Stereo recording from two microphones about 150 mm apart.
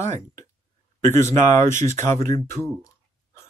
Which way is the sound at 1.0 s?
55° right (ahead or behind).